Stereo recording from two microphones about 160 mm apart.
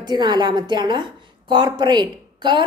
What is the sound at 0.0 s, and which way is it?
A woman's voice, 25° right (ahead or behind).